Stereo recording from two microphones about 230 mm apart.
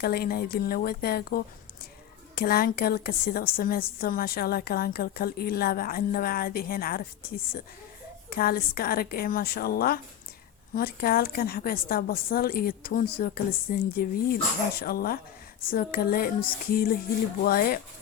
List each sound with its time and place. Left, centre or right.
0.0 s a woman's voice: left
8.3 s a woman's voice: left